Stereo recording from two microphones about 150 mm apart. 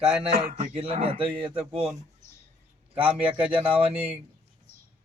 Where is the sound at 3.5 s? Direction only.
35° right (ahead or behind).